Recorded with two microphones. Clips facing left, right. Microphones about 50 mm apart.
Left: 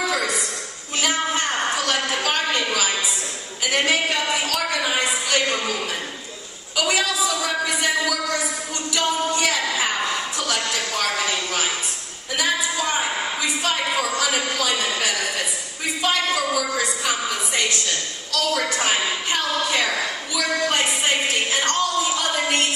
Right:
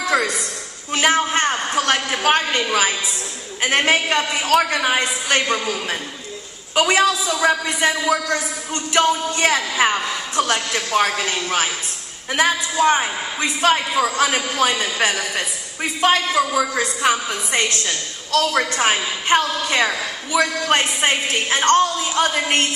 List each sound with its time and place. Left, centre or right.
1.1 s a sound: right
3.6 s a man's voice: right
6.7 s a woman's voice: right